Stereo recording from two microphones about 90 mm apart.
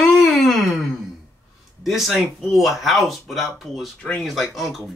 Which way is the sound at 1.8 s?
5° right (ahead or behind).